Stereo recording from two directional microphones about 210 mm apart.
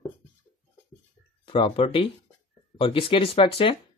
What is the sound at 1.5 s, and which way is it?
Speech, 25° left (ahead or behind).